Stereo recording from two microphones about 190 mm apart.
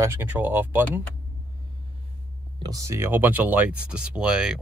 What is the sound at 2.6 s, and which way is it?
Speech, 15° right (ahead or behind).